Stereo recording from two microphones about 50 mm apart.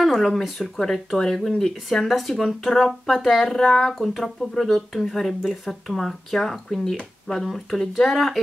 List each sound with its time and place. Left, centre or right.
0.0 s speech: centre